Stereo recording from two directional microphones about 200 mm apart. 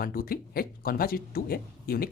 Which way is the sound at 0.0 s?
45° left (ahead or behind).